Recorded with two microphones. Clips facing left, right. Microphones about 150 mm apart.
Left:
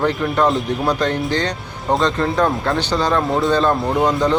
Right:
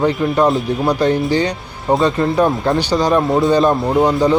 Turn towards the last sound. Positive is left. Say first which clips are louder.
# right 3 dB
turn(degrees=-10)  # may be behind; listen again after turning